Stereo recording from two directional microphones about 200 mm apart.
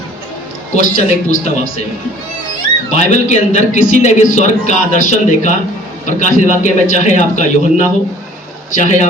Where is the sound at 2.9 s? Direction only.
35° left (ahead or behind).